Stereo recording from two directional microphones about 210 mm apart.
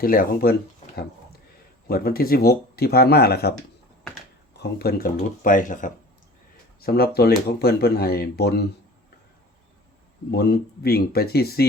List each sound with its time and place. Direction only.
0.0 s speech: 45° left (ahead or behind)
1.9 s speech: 45° left (ahead or behind)
4.8 s speech: 45° left (ahead or behind)
10.3 s speech: 50° left (ahead or behind)